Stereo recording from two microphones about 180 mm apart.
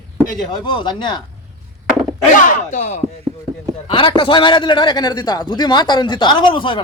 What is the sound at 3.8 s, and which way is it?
A man's voice, 30° left (ahead or behind).